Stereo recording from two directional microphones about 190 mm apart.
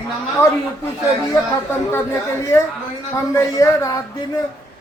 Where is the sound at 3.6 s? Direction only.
15° left (ahead or behind).